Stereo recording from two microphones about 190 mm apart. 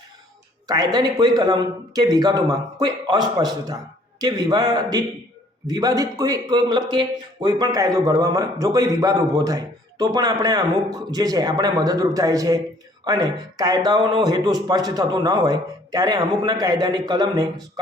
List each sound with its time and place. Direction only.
0.7 s speech: 20° right (ahead or behind)